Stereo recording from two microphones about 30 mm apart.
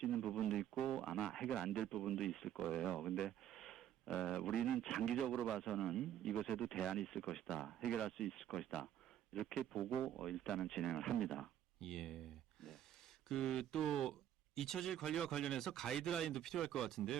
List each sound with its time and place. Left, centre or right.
0.0 s radio: centre
1.6 s a man's voice: centre
13.2 s a man's voice: centre